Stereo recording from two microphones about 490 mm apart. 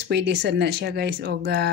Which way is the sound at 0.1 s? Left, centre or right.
Right.